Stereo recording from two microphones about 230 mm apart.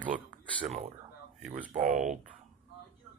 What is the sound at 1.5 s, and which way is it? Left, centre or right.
Speech, right.